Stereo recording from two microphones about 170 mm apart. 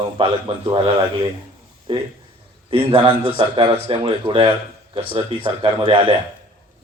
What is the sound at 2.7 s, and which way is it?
Speech, 35° right (ahead or behind).